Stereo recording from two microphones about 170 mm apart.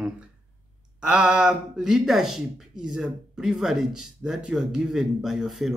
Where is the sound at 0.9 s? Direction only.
5° right (ahead or behind).